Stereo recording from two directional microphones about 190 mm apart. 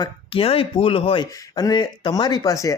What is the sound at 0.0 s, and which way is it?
Speech, 30° left (ahead or behind).